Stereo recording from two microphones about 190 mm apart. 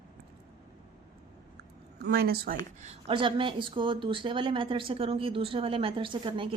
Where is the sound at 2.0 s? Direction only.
55° right (ahead or behind).